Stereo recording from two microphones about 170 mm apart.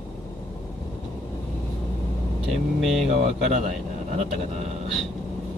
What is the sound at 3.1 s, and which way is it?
Speech, 35° right (ahead or behind).